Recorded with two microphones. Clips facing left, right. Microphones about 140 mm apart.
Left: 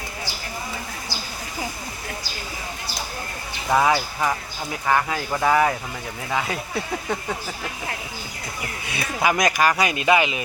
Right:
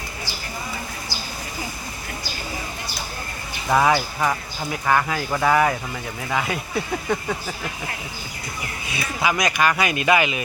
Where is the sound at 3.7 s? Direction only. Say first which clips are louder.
Right 1 dB; 10° left (ahead or behind).